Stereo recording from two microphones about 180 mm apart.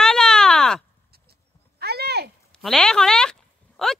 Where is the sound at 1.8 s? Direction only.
65° right (ahead or behind).